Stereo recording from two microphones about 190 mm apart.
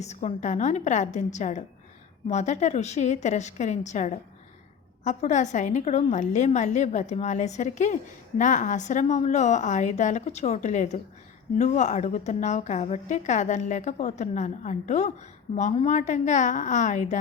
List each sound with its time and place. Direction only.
0.0 s a woman's voice: 35° left (ahead or behind)